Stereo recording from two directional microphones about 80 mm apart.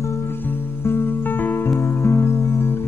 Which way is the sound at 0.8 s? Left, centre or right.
Left.